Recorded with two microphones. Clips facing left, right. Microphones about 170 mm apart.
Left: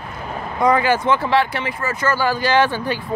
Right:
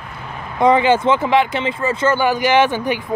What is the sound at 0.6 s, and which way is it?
Speech, 20° right (ahead or behind).